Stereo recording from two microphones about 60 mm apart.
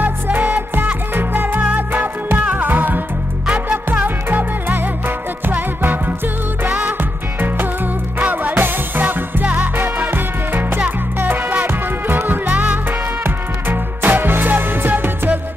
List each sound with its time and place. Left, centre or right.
0.0 s music: right
3.4 s music: centre; by 15.3 s right